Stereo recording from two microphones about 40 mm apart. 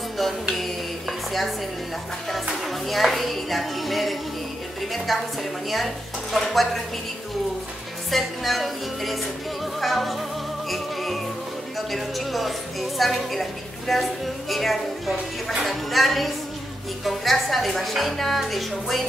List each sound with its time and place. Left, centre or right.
2.6 s a woman's voice: centre
6.3 s a woman's voice: centre
8.1 s a woman's voice: centre
9.8 s music: centre
11.9 s a woman's voice: centre